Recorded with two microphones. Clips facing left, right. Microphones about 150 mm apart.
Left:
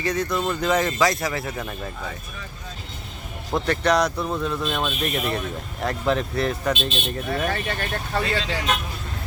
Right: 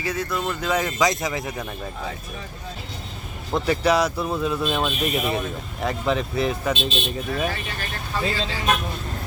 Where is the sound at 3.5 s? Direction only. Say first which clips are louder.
Right 1 dB; 5° right (ahead or behind).